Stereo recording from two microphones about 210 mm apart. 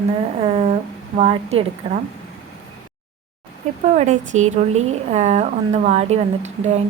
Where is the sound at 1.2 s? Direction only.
30° right (ahead or behind).